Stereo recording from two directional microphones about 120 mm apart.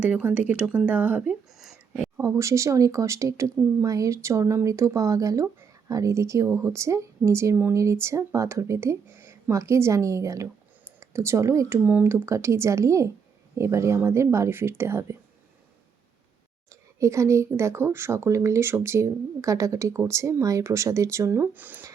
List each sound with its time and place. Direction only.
0.0 s speech: 10° right (ahead or behind)
2.1 s a woman's voice: 25° right (ahead or behind)
17.0 s a woman's voice: 25° right (ahead or behind)